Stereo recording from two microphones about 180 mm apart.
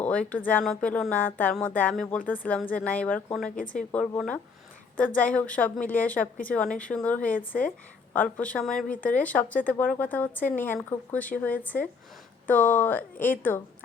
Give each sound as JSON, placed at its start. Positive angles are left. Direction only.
{"t": 0.0, "sound": "speech", "side_deg": 10}
{"t": 3.5, "sound": "a woman's voice", "side_deg": 50}
{"t": 3.9, "sound": "speech", "side_deg": 5}